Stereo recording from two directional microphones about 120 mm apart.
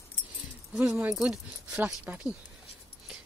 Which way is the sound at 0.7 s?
15° right (ahead or behind).